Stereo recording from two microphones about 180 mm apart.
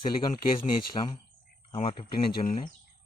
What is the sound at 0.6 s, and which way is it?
Speech, 30° left (ahead or behind).